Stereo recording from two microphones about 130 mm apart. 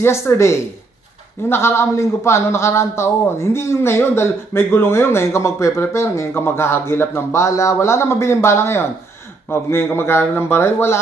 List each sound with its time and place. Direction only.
0.0 s a man's voice: 20° left (ahead or behind)